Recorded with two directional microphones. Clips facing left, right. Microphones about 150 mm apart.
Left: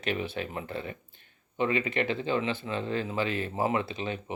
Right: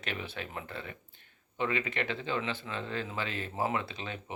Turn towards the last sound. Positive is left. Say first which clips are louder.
# left 5 dB
turn(degrees=20)  # may be behind; listen again after turning